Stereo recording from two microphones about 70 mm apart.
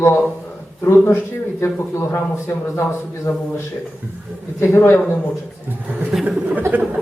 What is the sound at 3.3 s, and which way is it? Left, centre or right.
Speech, left.